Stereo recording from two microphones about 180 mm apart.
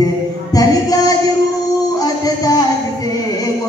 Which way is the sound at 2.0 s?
20° left (ahead or behind).